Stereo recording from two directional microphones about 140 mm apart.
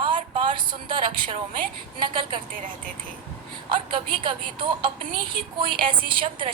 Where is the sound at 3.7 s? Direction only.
35° right (ahead or behind).